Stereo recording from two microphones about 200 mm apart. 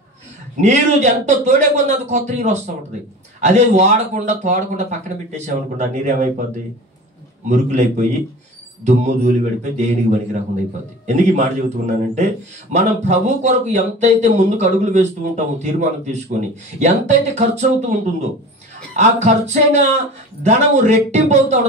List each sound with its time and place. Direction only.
0.6 s speech: 35° right (ahead or behind)
7.4 s speech: 35° right (ahead or behind)
8.8 s speech: 35° right (ahead or behind)
11.1 s speech: 35° right (ahead or behind)
18.9 s speech: 35° right (ahead or behind)